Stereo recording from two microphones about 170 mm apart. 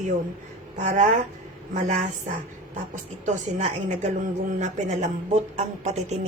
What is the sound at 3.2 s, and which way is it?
A man's voice, 45° right (ahead or behind).